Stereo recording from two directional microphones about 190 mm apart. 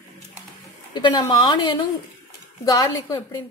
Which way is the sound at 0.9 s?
25° left (ahead or behind).